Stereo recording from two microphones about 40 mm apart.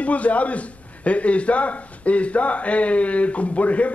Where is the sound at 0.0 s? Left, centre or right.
Left.